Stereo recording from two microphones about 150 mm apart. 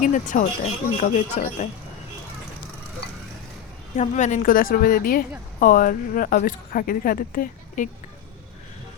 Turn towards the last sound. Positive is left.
turn(degrees=65)  # may be behind; listen again after turning